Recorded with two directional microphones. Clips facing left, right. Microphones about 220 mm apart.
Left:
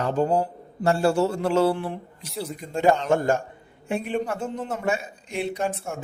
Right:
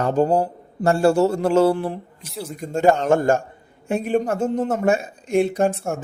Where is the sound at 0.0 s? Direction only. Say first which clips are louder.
Right 4 dB; 40° right (ahead or behind).